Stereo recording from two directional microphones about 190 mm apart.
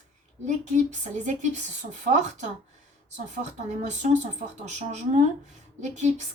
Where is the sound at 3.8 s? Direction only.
40° right (ahead or behind).